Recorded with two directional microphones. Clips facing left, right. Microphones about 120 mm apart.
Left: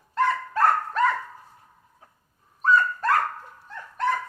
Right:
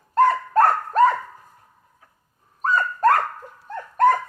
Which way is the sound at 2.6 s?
45° right (ahead or behind).